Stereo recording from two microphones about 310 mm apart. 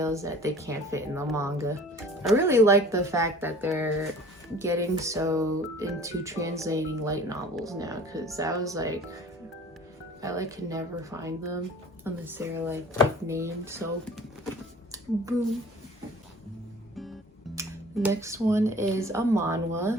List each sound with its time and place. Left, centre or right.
0.0 s a woman's voice: centre
17.5 s speech: centre